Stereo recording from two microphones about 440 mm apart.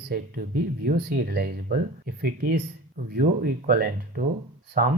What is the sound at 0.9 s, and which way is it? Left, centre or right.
Speech, right.